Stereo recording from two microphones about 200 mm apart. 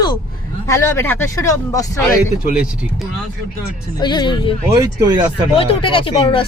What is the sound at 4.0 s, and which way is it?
Speech, 20° left (ahead or behind).